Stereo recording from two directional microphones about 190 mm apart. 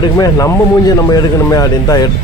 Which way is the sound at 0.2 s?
20° left (ahead or behind).